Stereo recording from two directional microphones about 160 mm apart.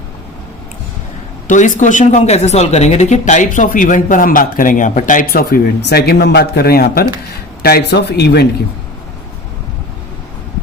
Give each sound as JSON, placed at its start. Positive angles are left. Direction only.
{"t": 1.5, "sound": "speech", "side_deg": 50}
{"t": 7.6, "sound": "speech", "side_deg": 85}